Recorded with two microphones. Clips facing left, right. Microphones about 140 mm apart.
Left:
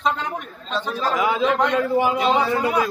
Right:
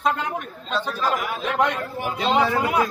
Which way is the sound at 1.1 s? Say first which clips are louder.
Left 5 dB; 90° left.